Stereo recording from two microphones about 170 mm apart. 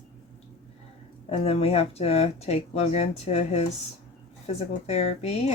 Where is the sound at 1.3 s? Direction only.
35° left (ahead or behind).